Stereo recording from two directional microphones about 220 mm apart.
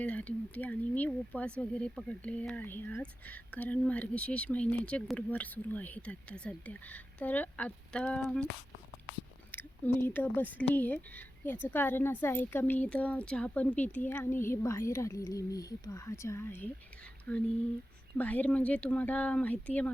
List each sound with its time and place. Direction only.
0.0 s speech: 5° left (ahead or behind)
9.5 s speech: 10° left (ahead or behind)